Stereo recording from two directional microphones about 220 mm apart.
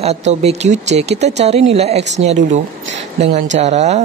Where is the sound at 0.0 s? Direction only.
30° right (ahead or behind).